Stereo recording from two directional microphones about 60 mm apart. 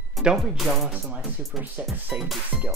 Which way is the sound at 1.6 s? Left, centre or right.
Right.